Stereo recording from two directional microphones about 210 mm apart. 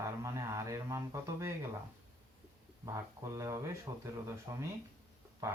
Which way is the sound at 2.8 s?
15° right (ahead or behind).